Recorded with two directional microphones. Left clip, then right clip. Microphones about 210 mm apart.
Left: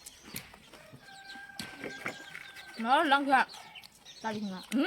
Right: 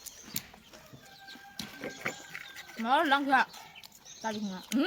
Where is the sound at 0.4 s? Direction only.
25° right (ahead or behind).